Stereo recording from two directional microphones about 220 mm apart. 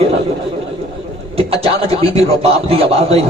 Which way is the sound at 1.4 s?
25° right (ahead or behind).